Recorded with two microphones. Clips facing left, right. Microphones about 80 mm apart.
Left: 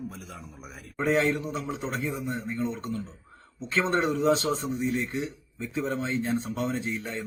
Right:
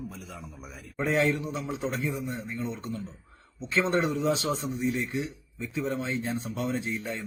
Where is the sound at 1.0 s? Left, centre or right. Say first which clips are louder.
Left 1 dB; left.